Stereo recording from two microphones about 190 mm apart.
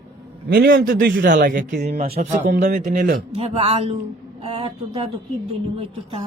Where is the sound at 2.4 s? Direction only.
40° right (ahead or behind).